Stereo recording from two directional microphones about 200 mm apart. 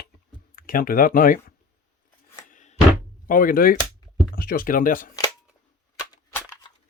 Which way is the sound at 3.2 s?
45° left (ahead or behind).